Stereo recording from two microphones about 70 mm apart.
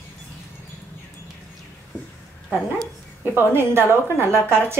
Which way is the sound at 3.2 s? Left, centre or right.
Right.